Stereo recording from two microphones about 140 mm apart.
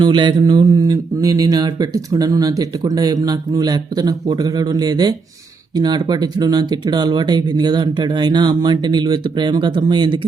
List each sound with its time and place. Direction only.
0.0 s speech: 35° right (ahead or behind)